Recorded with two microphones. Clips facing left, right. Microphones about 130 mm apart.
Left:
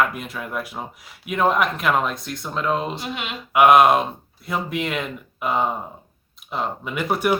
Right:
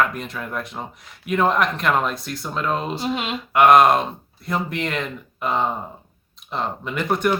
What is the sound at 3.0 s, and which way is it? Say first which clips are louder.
Speech: right 5 dB; 30° right (ahead or behind).